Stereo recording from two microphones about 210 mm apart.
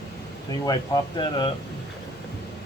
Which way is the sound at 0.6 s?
20° left (ahead or behind).